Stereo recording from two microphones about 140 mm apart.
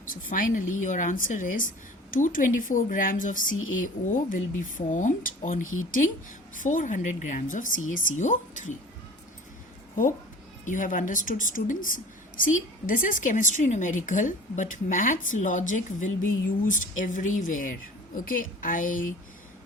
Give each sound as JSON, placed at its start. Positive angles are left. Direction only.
{"t": 0.1, "sound": "a woman's voice", "side_deg": 70}
{"t": 6.6, "sound": "a woman's voice", "side_deg": 65}
{"t": 10.7, "sound": "a woman's voice", "side_deg": 70}